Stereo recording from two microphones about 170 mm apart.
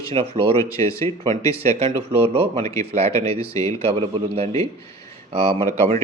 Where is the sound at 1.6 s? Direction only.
35° right (ahead or behind).